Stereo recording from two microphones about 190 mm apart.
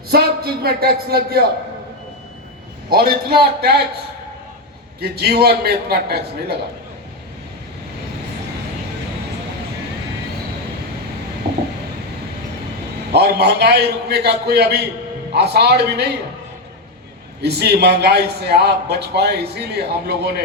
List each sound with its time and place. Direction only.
0.1 s a man's voice: 55° right (ahead or behind)
2.9 s a man's voice: 55° right (ahead or behind)
4.9 s a man's voice: 55° right (ahead or behind)
13.1 s a man's voice: 55° right (ahead or behind)
17.4 s a man's voice: 60° right (ahead or behind)